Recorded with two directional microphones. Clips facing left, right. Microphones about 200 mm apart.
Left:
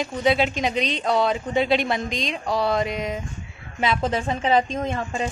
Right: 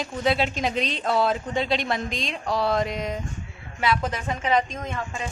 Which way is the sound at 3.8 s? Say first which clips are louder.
Left 3 dB; 25° left (ahead or behind).